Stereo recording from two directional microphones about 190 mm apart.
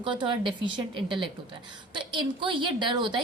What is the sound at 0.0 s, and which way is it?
A woman's voice, 25° right (ahead or behind).